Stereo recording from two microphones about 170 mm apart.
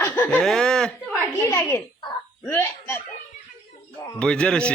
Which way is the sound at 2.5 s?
15° left (ahead or behind).